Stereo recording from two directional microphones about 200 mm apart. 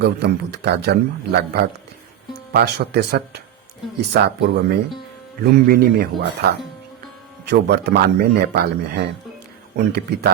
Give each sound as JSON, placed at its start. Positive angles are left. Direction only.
{"t": 0.0, "sound": "a man's voice", "side_deg": -55}